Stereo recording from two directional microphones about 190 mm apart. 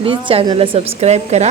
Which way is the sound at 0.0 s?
25° right (ahead or behind).